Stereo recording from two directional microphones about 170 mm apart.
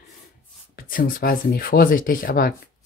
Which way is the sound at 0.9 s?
55° left (ahead or behind).